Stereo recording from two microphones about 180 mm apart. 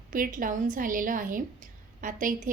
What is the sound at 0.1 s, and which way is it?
A woman's voice, 50° right (ahead or behind).